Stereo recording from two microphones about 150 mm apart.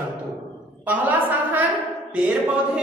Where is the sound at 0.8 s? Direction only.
10° right (ahead or behind).